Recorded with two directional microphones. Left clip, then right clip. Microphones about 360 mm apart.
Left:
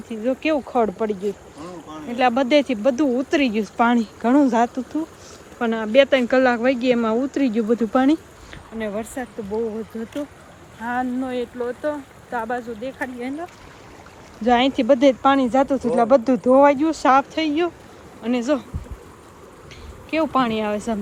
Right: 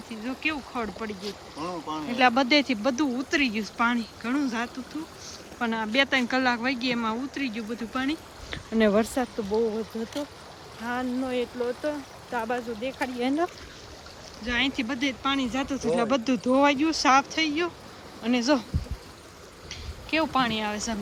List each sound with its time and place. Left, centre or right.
0.1 s speech: centre
1.2 s speech: centre
2.0 s speech: centre
8.4 s speech: right
10.8 s speech: centre
14.4 s speech: centre
20.1 s speech: centre